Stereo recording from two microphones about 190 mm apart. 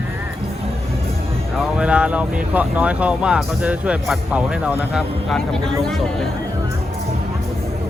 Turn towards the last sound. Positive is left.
turn(degrees=5)  # may be behind; listen again after turning